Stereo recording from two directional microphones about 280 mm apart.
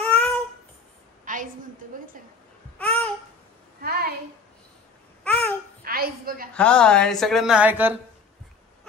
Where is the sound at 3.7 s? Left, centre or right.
Right.